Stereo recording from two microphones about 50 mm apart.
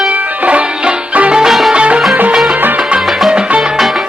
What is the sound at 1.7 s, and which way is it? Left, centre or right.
Music, right.